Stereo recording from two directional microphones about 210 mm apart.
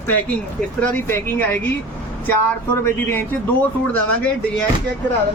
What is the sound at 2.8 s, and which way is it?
Speech, 10° left (ahead or behind).